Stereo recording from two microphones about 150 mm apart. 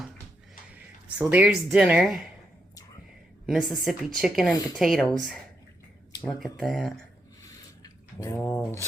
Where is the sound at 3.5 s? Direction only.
Centre (ahead or behind).